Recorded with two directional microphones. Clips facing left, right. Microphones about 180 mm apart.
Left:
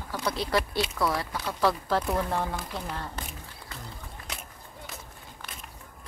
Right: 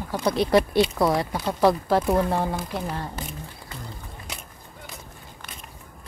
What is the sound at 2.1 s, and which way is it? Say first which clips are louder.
Speech: right 6 dB; 30° right (ahead or behind).